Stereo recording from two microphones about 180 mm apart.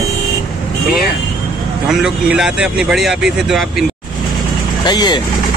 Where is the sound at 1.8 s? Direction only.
5° right (ahead or behind).